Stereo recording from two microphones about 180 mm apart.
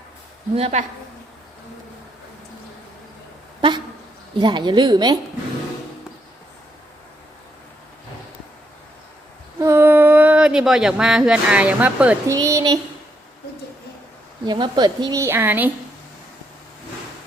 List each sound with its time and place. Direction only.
0.5 s a woman's voice: 35° right (ahead or behind)
4.4 s a woman's voice: 25° right (ahead or behind)
9.6 s a sound: 15° right (ahead or behind)
12.3 s speech: 20° right (ahead or behind)
14.4 s a woman's voice: 25° right (ahead or behind)